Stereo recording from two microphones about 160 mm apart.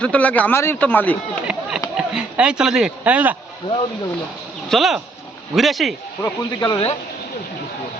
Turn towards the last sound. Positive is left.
turn(degrees=30)  # may be behind; listen again after turning